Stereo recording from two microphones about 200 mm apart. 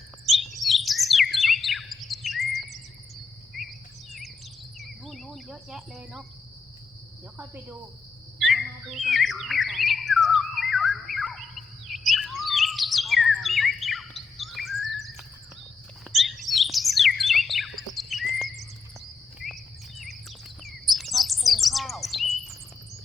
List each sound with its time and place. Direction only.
0.3 s bird: centre (ahead or behind)
4.8 s insect: centre (ahead or behind)
7.3 s cricket: 10° right (ahead or behind)
8.4 s bird: centre (ahead or behind)
16.1 s bird: centre (ahead or behind)
19.4 s bird vocalization: centre (ahead or behind)
20.7 s chirp: centre (ahead or behind)